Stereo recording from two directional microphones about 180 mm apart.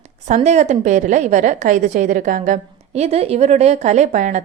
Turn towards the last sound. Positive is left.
turn(degrees=-45)  # may be behind; listen again after turning